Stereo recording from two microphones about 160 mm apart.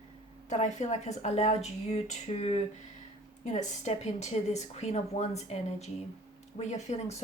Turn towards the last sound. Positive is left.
turn(degrees=45)  # may be behind; listen again after turning